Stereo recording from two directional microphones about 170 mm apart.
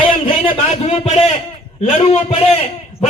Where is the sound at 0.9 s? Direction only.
40° left (ahead or behind).